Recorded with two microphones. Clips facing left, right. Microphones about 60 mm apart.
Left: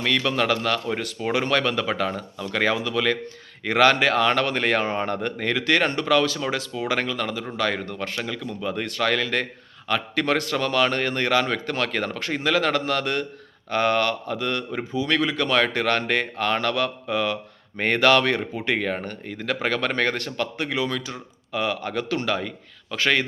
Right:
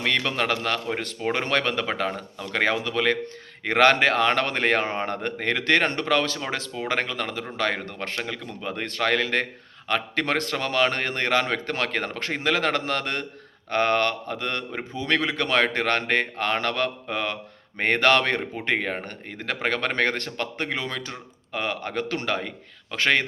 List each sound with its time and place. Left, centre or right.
0.3 s speech: right
2.7 s speech: right
8.7 s speech: right
15.2 s speech: right
19.6 s speech: right